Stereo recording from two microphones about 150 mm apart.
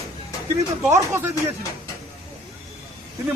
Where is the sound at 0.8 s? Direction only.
15° right (ahead or behind).